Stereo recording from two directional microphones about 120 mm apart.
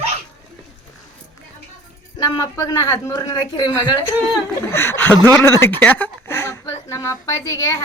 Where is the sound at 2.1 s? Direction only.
30° left (ahead or behind).